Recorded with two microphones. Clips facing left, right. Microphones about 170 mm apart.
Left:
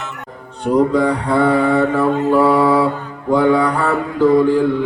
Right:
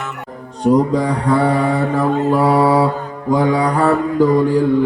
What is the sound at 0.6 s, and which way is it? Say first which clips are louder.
Mantra: even; 35° right (ahead or behind).